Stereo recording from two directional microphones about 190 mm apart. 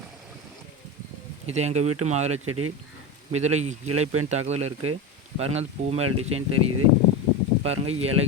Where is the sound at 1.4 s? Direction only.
35° right (ahead or behind).